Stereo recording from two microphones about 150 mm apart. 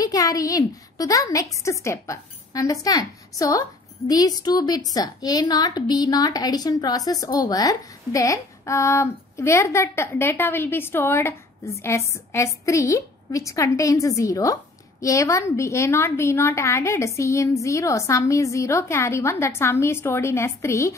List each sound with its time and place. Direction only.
0.0 s a woman's voice: 25° left (ahead or behind)